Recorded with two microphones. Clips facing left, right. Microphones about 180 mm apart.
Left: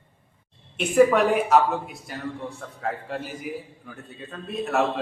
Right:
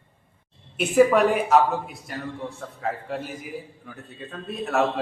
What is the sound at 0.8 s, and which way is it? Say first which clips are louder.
Speech: even; centre (ahead or behind).